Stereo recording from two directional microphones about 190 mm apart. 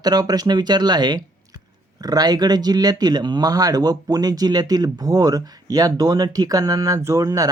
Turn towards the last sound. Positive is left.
turn(degrees=-20)  # may be behind; listen again after turning